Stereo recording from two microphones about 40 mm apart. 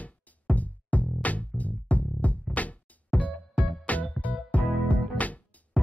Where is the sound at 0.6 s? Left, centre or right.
Left.